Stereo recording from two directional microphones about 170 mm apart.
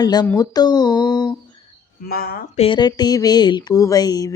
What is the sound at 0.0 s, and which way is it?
Speech, 25° left (ahead or behind).